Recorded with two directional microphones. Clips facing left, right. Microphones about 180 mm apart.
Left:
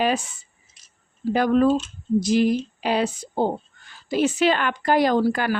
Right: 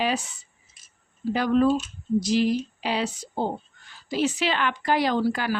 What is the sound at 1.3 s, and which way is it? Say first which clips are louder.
Speech: left 3 dB; 50° left (ahead or behind).